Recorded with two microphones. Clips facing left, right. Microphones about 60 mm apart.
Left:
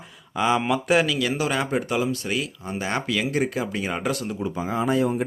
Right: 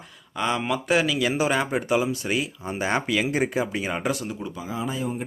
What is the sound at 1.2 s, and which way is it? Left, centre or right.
Speech, centre.